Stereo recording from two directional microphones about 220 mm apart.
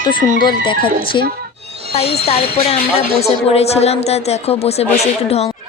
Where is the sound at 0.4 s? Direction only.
20° left (ahead or behind).